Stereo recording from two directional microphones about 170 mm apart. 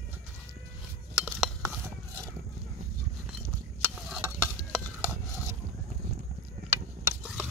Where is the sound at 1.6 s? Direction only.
15° right (ahead or behind).